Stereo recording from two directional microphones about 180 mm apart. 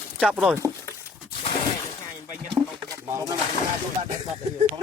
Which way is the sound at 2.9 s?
15° right (ahead or behind).